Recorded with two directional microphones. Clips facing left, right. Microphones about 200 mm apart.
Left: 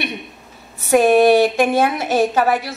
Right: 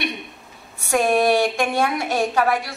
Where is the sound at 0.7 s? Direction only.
5° left (ahead or behind).